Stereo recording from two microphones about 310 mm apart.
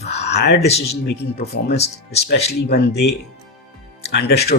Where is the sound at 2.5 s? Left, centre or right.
Left.